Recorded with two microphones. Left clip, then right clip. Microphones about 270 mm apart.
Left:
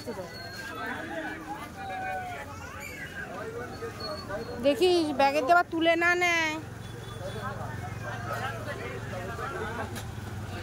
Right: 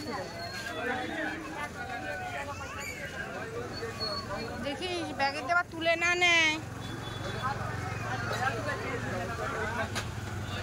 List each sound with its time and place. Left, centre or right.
4.6 s speech: left